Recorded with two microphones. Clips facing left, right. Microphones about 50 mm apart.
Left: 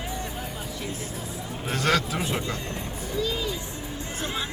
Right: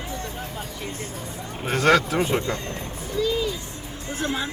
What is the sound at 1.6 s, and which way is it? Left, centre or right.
Speech, right.